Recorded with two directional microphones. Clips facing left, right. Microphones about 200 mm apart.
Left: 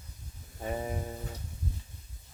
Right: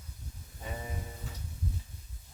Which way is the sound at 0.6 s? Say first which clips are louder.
Left 7 dB; 50° left (ahead or behind).